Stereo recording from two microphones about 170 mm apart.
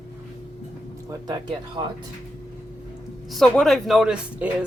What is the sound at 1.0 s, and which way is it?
Speech, 20° right (ahead or behind).